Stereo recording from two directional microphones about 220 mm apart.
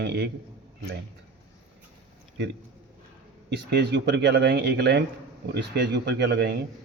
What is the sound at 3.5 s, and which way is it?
A man's voice, 50° right (ahead or behind).